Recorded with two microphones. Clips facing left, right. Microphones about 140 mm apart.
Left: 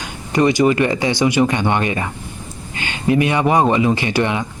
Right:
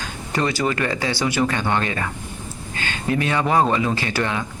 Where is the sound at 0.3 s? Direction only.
15° left (ahead or behind).